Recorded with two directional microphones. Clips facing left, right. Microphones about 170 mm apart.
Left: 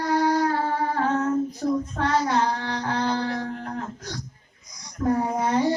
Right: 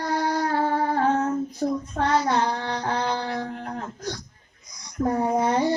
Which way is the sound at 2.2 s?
30° right (ahead or behind).